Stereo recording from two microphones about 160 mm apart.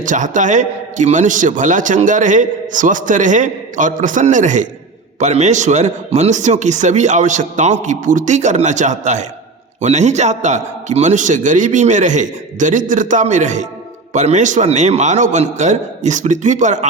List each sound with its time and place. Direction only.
0.0 s a man's voice: 55° right (ahead or behind)